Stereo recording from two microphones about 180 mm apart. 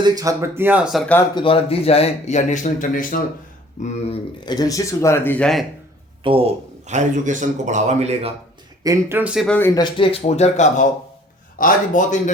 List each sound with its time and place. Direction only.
0.0 s speech: 20° right (ahead or behind); by 1.0 s 5° right (ahead or behind)
1.4 s speech: 30° left (ahead or behind)
4.4 s speech: 20° left (ahead or behind); by 5.6 s 5° left (ahead or behind)
6.2 s a man's voice: 30° right (ahead or behind)
8.8 s speech: 15° right (ahead or behind)
9.5 s speech: 10° left (ahead or behind)
9.8 s a man's voice: 30° left (ahead or behind)